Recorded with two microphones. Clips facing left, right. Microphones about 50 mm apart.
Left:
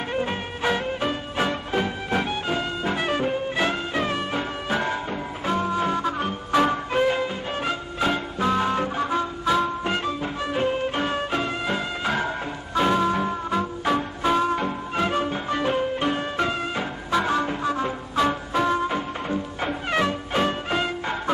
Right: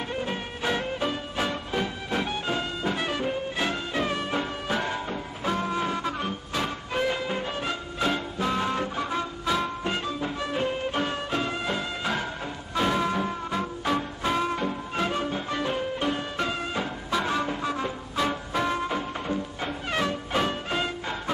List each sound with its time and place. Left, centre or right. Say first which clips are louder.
0.1 s music: left 4 dB; left
6.5 s music: left 12 dB; left
6.9 s music: left 5 dB; centre
10.2 s music: left 3 dB; centre
18.5 s music: left 4 dB; centre